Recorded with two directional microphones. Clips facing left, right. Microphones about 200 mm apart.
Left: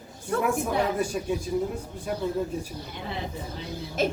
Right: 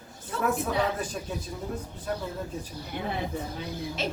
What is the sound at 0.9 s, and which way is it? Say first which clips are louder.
Speech: left 6 dB; 10° left (ahead or behind).